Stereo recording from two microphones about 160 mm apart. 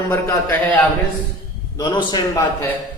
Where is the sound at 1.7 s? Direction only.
25° left (ahead or behind).